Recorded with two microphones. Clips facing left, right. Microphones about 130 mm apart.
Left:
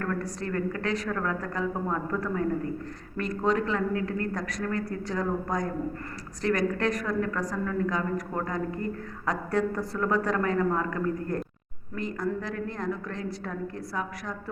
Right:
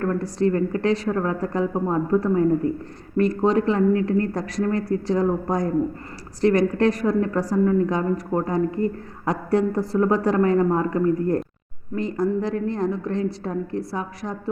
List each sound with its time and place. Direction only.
0.0 s a woman's voice: 30° right (ahead or behind)